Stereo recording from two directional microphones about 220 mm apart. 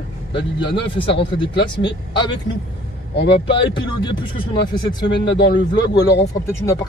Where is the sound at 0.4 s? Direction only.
50° left (ahead or behind).